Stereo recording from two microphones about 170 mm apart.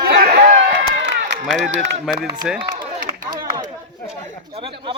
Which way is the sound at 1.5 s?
5° right (ahead or behind).